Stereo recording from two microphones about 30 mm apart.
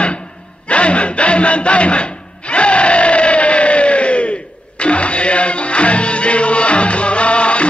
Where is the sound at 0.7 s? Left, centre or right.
Left.